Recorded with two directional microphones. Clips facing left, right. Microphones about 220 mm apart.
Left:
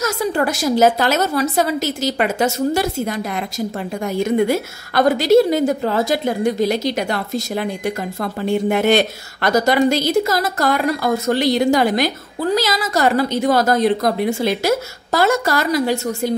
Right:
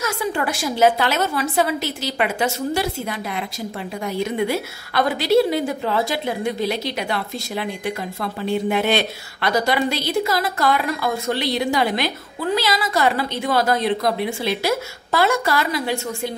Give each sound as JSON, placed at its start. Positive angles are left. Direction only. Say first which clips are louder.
{"t": 0.0, "sound": "a woman's voice", "louder": "left 4 dB", "side_deg": 40}